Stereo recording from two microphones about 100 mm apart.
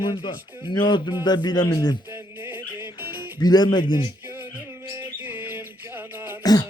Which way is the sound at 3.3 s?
45° left (ahead or behind).